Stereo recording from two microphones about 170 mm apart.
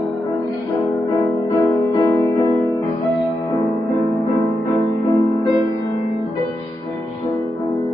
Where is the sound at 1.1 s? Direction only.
20° left (ahead or behind).